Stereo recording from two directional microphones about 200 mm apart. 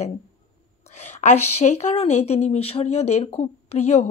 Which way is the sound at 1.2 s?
35° left (ahead or behind).